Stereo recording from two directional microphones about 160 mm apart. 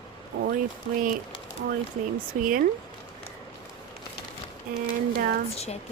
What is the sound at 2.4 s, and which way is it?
Speech, 60° right (ahead or behind).